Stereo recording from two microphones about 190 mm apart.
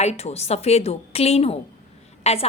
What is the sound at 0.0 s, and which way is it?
A woman's voice, 35° left (ahead or behind).